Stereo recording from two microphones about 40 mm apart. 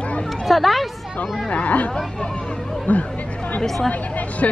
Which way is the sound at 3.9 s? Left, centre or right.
Left.